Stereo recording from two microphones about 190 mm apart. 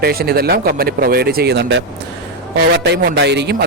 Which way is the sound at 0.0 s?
55° right (ahead or behind).